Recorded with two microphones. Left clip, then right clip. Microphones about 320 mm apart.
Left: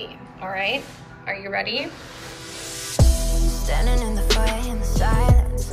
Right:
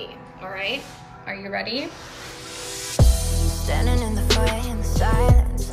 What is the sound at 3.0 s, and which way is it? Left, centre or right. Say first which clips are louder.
Music: left 1 dB; centre.